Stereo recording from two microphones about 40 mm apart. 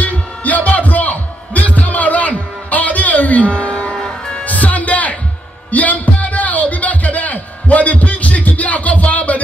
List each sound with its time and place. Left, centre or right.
0.0 s music: left
3.9 s music: centre
4.5 s music: left
5.7 s a sound: left